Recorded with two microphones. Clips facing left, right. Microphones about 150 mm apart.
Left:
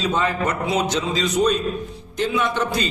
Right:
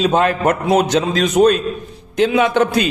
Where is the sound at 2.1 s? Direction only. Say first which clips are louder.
Right 8 dB; 75° right (ahead or behind).